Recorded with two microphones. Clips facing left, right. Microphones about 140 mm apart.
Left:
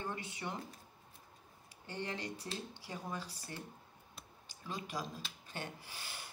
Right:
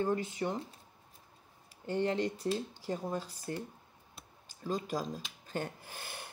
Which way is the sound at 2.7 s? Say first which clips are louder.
Right 8 dB; 45° right (ahead or behind).